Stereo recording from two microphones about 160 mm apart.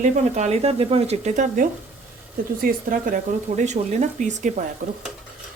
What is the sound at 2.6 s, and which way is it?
Speech, 65° right (ahead or behind).